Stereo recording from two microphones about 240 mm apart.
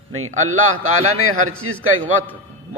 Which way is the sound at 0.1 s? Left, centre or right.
Right.